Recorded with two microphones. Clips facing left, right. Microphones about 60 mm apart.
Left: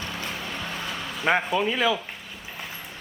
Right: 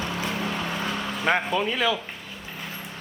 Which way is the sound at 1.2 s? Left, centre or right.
Centre.